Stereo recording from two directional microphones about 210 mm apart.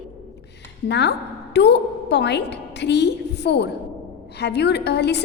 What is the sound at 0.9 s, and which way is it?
A woman's voice, 55° left (ahead or behind).